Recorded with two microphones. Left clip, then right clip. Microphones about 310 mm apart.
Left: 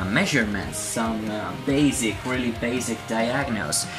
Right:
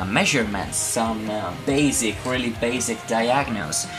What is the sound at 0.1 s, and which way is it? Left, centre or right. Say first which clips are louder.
Speech: right 3 dB; centre.